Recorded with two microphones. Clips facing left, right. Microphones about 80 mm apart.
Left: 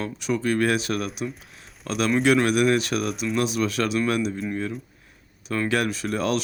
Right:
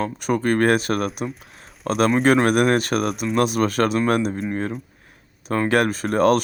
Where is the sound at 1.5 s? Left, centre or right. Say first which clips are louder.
Right 7 dB; right.